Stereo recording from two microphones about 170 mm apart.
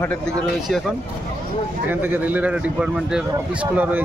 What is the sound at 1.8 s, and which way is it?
A man's voice, 10° right (ahead or behind).